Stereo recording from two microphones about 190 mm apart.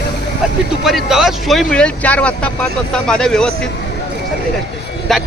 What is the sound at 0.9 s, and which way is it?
Speech, centre (ahead or behind).